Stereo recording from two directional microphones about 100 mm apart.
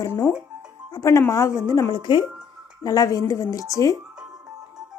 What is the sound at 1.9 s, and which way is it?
Speech, 55° left (ahead or behind).